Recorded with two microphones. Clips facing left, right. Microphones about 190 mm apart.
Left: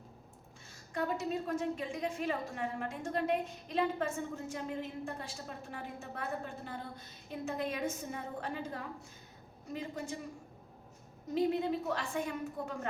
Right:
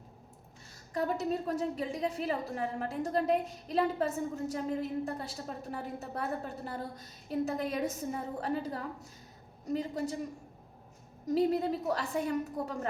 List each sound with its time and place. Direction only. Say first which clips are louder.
0.9 s a woman's voice: right 3 dB; 40° right (ahead or behind)
11.3 s a woman's voice: right 2 dB; 40° right (ahead or behind)